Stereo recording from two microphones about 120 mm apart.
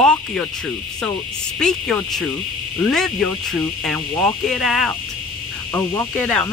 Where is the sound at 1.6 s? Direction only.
5° left (ahead or behind).